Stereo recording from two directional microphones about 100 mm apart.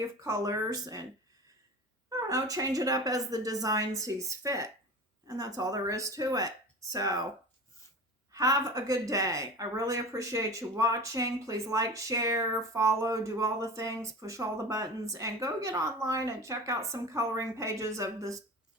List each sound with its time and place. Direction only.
0.0 s a woman's voice: 30° right (ahead or behind)
2.0 s a woman's voice: 35° right (ahead or behind)
8.3 s a woman's voice: 35° right (ahead or behind)